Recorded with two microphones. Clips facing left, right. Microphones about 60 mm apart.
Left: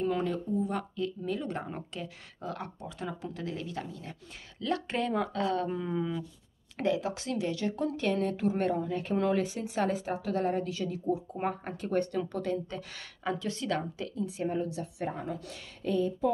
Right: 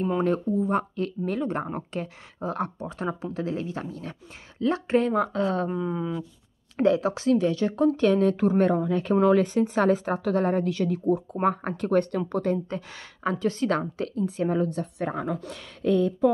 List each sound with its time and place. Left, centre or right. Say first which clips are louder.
0.2 s speech: right 7 dB; right
3.9 s speech: right 6 dB; right
4.6 s speech: right 8 dB; right
5.7 s speech: right 4 dB; centre
6.8 s speech: right 8 dB; right
9.3 s speech: right 9 dB; right
12.3 s speech: right 7 dB; right
13.7 s speech: right 6 dB; right
14.4 s a woman's voice: right 7 dB; right
15.5 s speech: right 7 dB; right